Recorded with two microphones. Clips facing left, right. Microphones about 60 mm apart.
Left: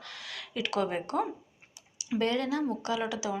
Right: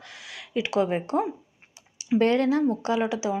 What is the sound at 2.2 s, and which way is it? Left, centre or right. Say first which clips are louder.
A woman's voice: right 7 dB; right.